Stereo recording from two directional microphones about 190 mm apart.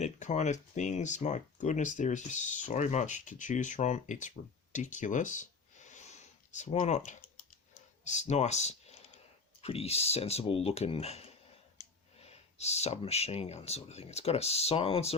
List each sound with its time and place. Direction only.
0.0 s speech: 40° left (ahead or behind)
4.7 s a sound: 40° left (ahead or behind)
8.0 s speech: 40° left (ahead or behind)